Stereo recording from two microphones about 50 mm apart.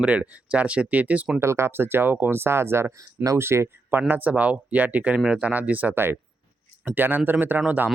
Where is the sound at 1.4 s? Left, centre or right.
Right.